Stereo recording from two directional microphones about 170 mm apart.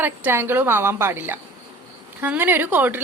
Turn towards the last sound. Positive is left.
turn(degrees=-10)  # may be behind; listen again after turning